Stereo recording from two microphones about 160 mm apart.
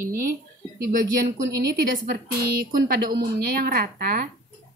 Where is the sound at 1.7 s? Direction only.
80° right; by 4.2 s 65° right (ahead or behind).